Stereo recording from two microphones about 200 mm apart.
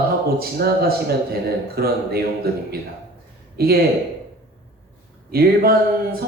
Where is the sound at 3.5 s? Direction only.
50° right (ahead or behind).